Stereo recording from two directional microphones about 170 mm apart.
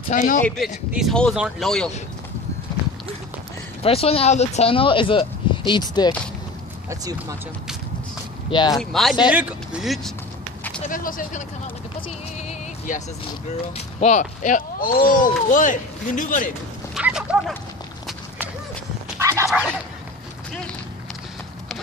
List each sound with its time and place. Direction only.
0.1 s speech: 50° left (ahead or behind)
0.9 s speech: centre (ahead or behind)
3.8 s speech: 35° left (ahead or behind)
6.9 s speech: 20° right (ahead or behind)
8.5 s speech: 25° left (ahead or behind)
8.7 s speech: centre (ahead or behind)
10.9 s speech: 55° left (ahead or behind)
12.4 s music: 45° left (ahead or behind)
13.7 s speech: 40° left (ahead or behind)
16.9 s a sound: 5° right (ahead or behind)
19.1 s dog: 15° right (ahead or behind)